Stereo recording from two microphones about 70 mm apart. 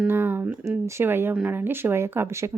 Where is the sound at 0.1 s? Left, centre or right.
Right.